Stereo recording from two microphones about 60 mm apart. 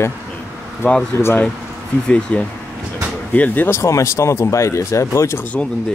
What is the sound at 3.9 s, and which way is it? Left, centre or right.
Speech, left.